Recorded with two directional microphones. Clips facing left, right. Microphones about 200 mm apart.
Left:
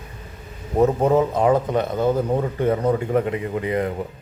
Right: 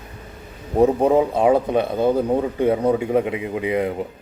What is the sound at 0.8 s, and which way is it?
A man's voice, 15° right (ahead or behind).